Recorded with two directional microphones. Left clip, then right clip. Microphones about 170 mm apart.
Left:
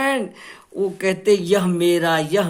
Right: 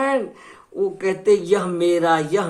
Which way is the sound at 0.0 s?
30° left (ahead or behind).